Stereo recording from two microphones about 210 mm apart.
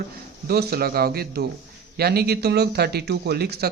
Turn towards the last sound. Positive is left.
turn(degrees=-50)  # may be behind; listen again after turning